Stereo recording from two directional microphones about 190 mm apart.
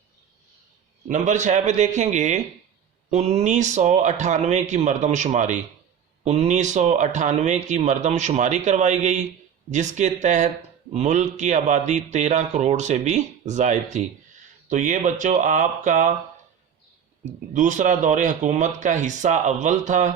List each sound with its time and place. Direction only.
1.0 s a man's voice: 40° right (ahead or behind)
17.5 s a man's voice: 40° right (ahead or behind)